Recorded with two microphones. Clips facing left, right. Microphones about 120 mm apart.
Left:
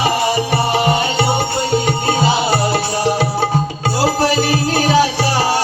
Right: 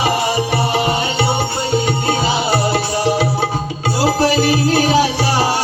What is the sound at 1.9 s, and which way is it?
Music, 50° left (ahead or behind).